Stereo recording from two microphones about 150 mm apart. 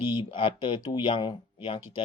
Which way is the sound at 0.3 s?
35° left (ahead or behind).